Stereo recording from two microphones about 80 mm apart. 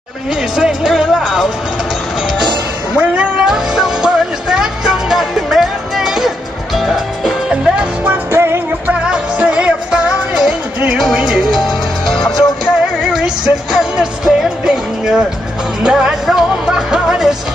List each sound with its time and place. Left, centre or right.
0.6 s music: centre
3.0 s music: centre
8.0 s music: right
9.0 s music: centre